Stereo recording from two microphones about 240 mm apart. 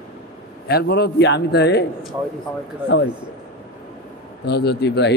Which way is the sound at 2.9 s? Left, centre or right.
Left.